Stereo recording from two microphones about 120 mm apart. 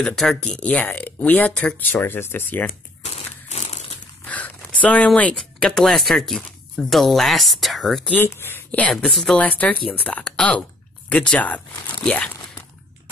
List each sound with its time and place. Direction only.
0.0 s speech: 5° left (ahead or behind); by 2.6 s 20° left (ahead or behind)
3.4 s crumpling: 75° left (ahead or behind)
4.2 s speech: 15° left (ahead or behind)
8.1 s speech: 20° left (ahead or behind)
8.9 s speech: centre (ahead or behind)